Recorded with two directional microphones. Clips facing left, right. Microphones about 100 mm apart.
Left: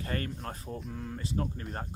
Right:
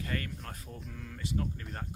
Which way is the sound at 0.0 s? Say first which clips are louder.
Left 3 dB; 35° left (ahead or behind).